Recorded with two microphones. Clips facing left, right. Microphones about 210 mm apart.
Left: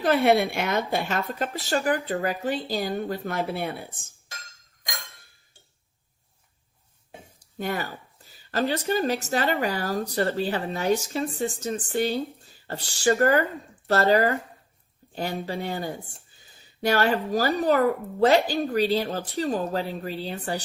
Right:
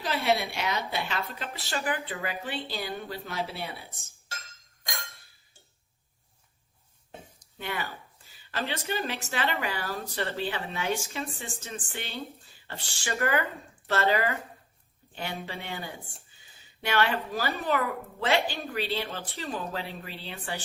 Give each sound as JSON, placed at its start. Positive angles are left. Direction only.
{"t": 0.0, "sound": "speech", "side_deg": 55}
{"t": 4.8, "sound": "glass", "side_deg": 15}
{"t": 7.6, "sound": "speech", "side_deg": 40}
{"t": 16.3, "sound": "a sound", "side_deg": 40}
{"t": 17.3, "sound": "speech", "side_deg": 40}